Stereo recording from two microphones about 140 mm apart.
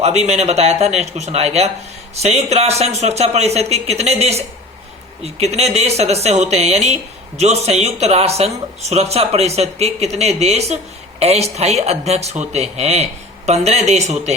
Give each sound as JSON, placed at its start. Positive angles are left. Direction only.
{"t": 0.0, "sound": "speech", "side_deg": -50}